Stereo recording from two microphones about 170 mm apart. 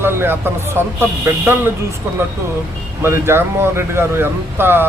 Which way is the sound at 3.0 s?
15° right (ahead or behind).